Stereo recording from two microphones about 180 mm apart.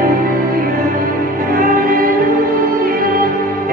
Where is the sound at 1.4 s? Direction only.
50° right (ahead or behind).